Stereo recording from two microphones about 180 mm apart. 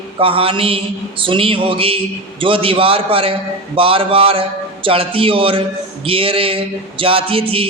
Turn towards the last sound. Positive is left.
turn(degrees=-30)  # may be behind; listen again after turning